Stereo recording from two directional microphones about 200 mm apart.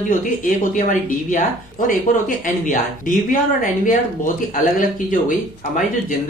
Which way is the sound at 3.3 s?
40° left (ahead or behind).